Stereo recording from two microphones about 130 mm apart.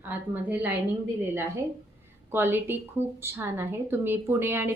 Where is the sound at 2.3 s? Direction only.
15° right (ahead or behind).